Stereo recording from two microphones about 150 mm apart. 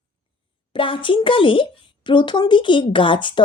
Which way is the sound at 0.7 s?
35° left (ahead or behind).